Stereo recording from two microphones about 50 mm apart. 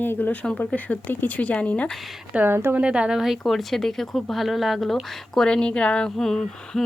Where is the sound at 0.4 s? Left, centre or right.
Centre.